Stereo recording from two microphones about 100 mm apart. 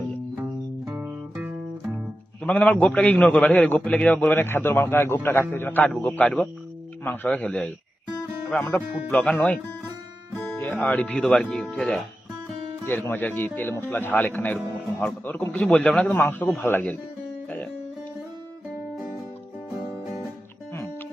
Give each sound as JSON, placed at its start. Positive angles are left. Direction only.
{"t": 0.9, "sound": "music", "side_deg": -15}
{"t": 2.4, "sound": "a man's voice", "side_deg": 10}
{"t": 9.0, "sound": "a man's voice", "side_deg": 15}
{"t": 10.6, "sound": "a man's voice", "side_deg": 10}
{"t": 12.8, "sound": "a man's voice", "side_deg": 20}